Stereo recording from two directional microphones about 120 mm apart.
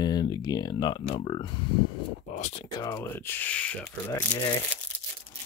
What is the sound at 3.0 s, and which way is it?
Speech, 20° left (ahead or behind).